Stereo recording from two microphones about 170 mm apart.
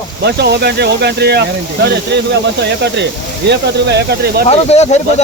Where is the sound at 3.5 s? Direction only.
80° right.